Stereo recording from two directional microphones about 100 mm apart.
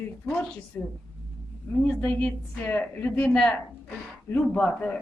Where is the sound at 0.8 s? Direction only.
20° left (ahead or behind).